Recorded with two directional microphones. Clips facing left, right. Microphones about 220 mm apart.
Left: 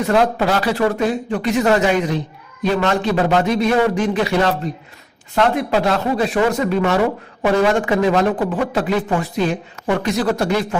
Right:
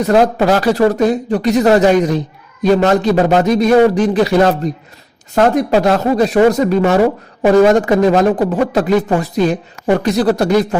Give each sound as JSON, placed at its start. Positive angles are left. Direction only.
{"t": 0.0, "sound": "speech", "side_deg": -40}